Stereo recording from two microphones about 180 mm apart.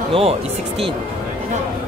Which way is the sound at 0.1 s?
30° right (ahead or behind).